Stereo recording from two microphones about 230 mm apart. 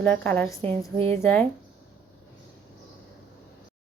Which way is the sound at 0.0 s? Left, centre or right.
Centre.